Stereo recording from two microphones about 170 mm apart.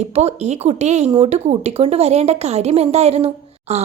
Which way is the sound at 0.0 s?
40° right (ahead or behind).